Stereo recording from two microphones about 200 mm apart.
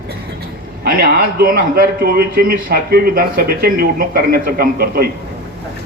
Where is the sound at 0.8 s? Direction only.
45° right (ahead or behind).